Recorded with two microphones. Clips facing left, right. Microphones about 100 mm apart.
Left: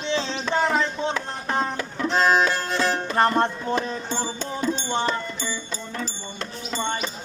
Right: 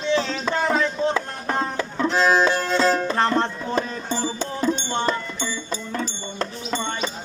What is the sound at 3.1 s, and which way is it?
Music, 10° left (ahead or behind).